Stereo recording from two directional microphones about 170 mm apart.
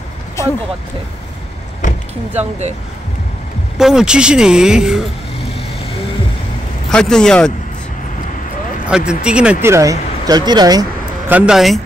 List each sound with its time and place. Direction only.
0.4 s vehicle: 15° left (ahead or behind)
3.7 s speech: 5° right (ahead or behind)
6.9 s speech: 5° left (ahead or behind)
8.8 s speech: 5° right (ahead or behind); by 10.9 s 25° right (ahead or behind)
11.2 s speech: 5° right (ahead or behind)